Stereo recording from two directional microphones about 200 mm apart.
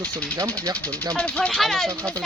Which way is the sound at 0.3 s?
15° right (ahead or behind).